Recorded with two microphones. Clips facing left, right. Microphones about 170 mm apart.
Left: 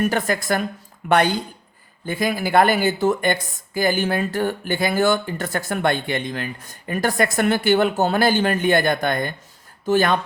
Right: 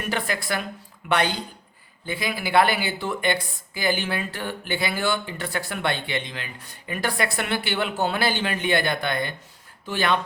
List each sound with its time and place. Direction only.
0.0 s speech: 45° left (ahead or behind)